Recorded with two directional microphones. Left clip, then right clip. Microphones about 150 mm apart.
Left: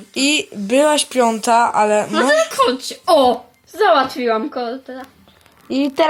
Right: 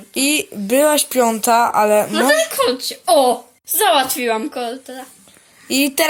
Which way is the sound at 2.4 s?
60° left (ahead or behind).